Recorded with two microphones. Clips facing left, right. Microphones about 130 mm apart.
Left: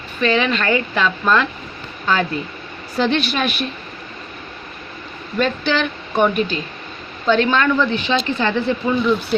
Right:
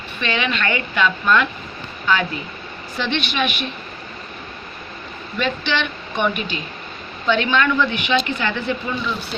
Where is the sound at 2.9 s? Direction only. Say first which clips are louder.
Left 5 dB; 40° left (ahead or behind).